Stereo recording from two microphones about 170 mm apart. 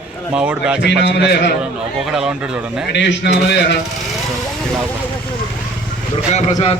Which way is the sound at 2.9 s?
90° left.